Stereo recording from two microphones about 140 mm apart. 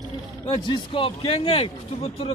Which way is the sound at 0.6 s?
40° left (ahead or behind).